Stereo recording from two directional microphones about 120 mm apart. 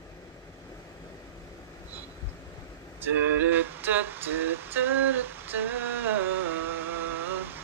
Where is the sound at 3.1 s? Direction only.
15° right (ahead or behind).